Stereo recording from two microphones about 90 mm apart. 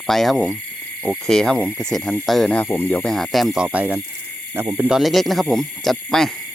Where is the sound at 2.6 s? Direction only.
25° left (ahead or behind).